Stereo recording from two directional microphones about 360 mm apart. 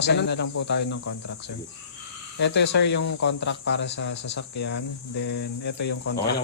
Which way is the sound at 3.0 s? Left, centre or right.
Left.